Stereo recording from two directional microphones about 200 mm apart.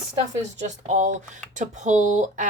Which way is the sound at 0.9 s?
40° right (ahead or behind).